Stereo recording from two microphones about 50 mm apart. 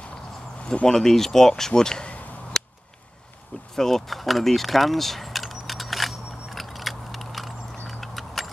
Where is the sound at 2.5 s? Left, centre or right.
Centre.